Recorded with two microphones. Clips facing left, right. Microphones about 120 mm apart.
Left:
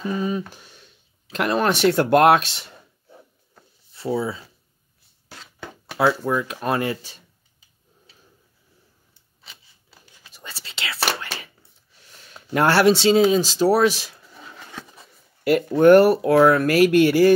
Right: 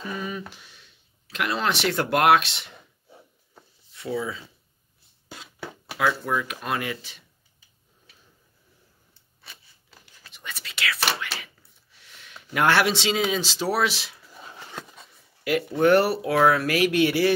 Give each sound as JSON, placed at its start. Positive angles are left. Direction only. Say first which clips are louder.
{"t": 0.1, "sound": "speech", "louder": "left 7 dB", "side_deg": 35}
{"t": 3.9, "sound": "speech", "louder": "left 5 dB", "side_deg": 30}
{"t": 5.3, "sound": "a sound", "louder": "right 1 dB", "side_deg": -10}
{"t": 6.2, "sound": "speech", "louder": "left 5 dB", "side_deg": 30}
{"t": 10.3, "sound": "whispering", "louder": "even", "side_deg": 35}
{"t": 11.1, "sound": "a sound", "louder": "left 2 dB", "side_deg": 45}
{"t": 12.5, "sound": "speech", "louder": "left 5 dB", "side_deg": 40}
{"t": 15.4, "sound": "speech", "louder": "left 6 dB", "side_deg": 45}